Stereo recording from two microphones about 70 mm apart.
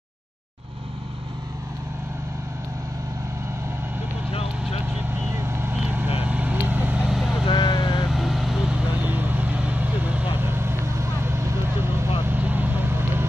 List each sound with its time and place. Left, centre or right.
5.3 s vehicle: right
5.7 s vehicle: right
7.0 s vehicle: centre
7.4 s vehicle: left
8.1 s vehicle: centre
9.0 s vehicle: right
12.4 s vehicle: right